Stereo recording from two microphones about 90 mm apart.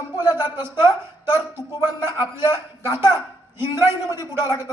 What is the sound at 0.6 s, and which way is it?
Speech, 30° right (ahead or behind).